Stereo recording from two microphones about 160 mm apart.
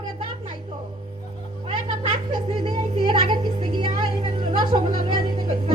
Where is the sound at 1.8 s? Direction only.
30° right (ahead or behind).